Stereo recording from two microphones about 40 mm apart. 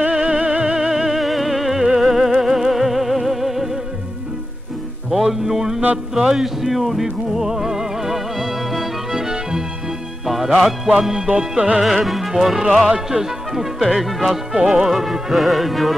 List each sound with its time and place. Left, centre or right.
0.1 s music: right
0.7 s music: centre
5.1 s music: centre
11.0 s speech: centre
11.2 s music: right
11.8 s music: centre
12.8 s speech: centre
14.9 s music: centre
15.3 s music: centre